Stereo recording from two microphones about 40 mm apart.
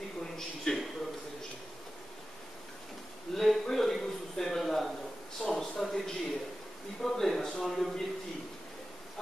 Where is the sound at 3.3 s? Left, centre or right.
Centre.